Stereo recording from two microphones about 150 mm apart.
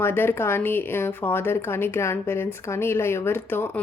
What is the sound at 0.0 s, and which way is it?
Speech, 15° left (ahead or behind).